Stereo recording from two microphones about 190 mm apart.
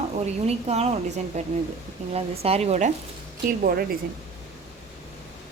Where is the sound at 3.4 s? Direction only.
50° right (ahead or behind).